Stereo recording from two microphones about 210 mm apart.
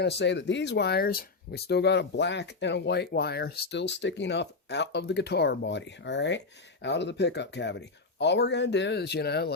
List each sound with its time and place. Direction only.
0.0 s speech: 55° left (ahead or behind)